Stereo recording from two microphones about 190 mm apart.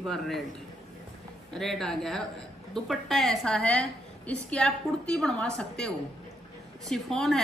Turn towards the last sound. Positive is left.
turn(degrees=0)  # may be behind; listen again after turning